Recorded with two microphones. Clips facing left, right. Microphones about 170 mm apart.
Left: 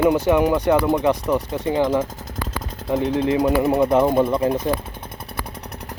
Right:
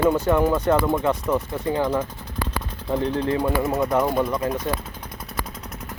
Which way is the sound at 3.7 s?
30° left (ahead or behind).